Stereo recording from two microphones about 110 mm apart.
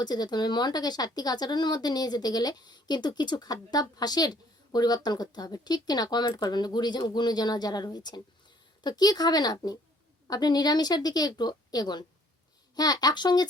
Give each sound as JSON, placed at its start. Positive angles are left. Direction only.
{"t": 0.0, "sound": "a woman's voice", "side_deg": 40}